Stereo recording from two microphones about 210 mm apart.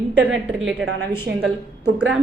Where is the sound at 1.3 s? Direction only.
50° right (ahead or behind).